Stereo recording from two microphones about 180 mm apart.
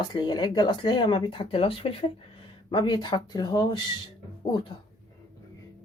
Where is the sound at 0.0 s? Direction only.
25° left (ahead or behind).